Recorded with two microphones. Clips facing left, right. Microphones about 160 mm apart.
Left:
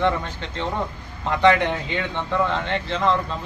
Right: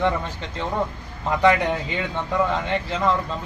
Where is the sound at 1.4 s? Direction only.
5° right (ahead or behind).